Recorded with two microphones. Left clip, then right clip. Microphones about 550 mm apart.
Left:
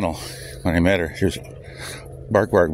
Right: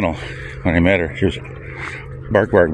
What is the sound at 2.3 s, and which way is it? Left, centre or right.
Speech, left.